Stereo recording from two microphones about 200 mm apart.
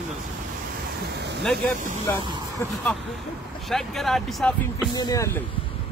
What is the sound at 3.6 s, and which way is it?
Speech, centre (ahead or behind).